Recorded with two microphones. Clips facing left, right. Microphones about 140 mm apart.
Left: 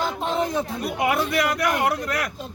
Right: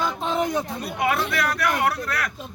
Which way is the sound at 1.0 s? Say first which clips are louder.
Left 1 dB; 15° left (ahead or behind).